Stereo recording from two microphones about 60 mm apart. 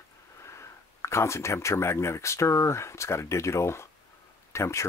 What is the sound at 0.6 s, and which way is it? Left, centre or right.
Speech, left.